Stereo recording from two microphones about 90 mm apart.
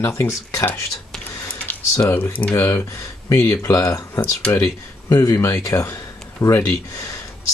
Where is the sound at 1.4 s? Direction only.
15° left (ahead or behind).